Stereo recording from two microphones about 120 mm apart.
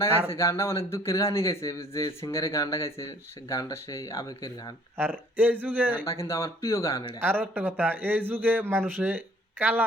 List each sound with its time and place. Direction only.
0.3 s a man's voice: 25° left (ahead or behind)
4.9 s speech: 15° right (ahead or behind)
6.1 s a man's voice: 25° left (ahead or behind)
7.2 s speech: 15° right (ahead or behind)